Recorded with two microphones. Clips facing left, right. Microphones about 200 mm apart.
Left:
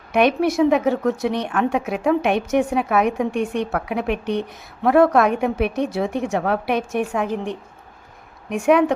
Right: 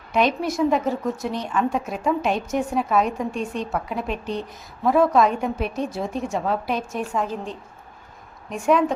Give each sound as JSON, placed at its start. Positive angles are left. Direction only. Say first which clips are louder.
{"t": 0.1, "sound": "a woman's voice", "louder": "left 4 dB", "side_deg": 65}
{"t": 8.4, "sound": "a woman's voice", "louder": "left 4 dB", "side_deg": 70}